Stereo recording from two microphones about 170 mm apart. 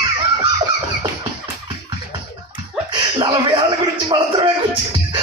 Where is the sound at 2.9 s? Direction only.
30° right (ahead or behind).